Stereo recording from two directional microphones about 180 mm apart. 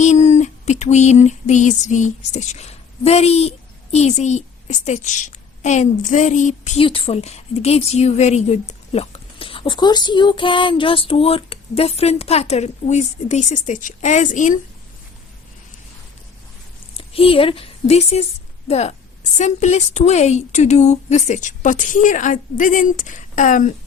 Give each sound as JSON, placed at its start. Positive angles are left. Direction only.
{"t": 0.0, "sound": "a sound", "side_deg": 40}
{"t": 3.9, "sound": "a woman's voice", "side_deg": 40}
{"t": 6.8, "sound": "a woman's voice", "side_deg": 30}
{"t": 17.0, "sound": "a woman's voice", "side_deg": 30}